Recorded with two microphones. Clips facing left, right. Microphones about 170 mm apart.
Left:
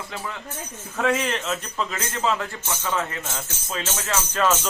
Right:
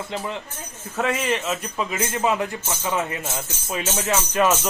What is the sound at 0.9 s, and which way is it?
A man's voice, 5° right (ahead or behind).